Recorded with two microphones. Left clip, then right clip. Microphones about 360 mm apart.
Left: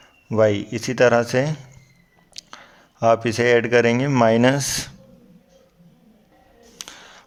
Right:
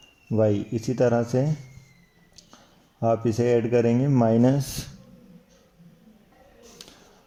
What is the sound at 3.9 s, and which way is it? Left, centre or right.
Speech, left.